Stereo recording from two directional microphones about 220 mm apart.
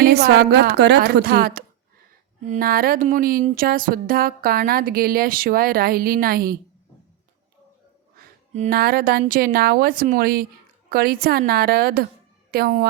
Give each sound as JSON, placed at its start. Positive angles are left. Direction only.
{"t": 0.0, "sound": "a woman's voice", "side_deg": -45}
{"t": 2.5, "sound": "a sound", "side_deg": -40}
{"t": 8.5, "sound": "a woman's voice", "side_deg": -35}